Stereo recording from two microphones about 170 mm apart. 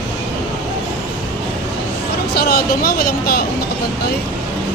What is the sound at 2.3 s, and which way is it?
Speech, 65° left (ahead or behind).